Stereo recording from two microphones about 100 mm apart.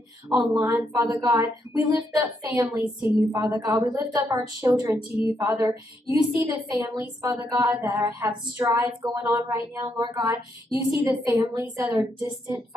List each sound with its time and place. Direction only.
0.4 s a woman's voice: 30° right (ahead or behind)